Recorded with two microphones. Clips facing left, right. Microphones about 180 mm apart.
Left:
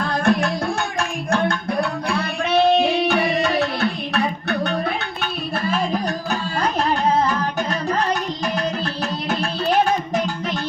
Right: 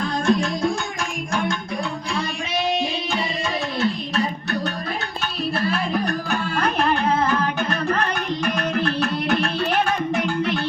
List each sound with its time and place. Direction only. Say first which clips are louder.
0.0 s music: left 1 dB; 60° left (ahead or behind)
2.1 s music: left 8 dB; 60° left (ahead or behind)
8.4 s music: right 1 dB; 60° right (ahead or behind)